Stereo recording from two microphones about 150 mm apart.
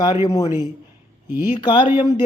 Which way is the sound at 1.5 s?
30° left (ahead or behind).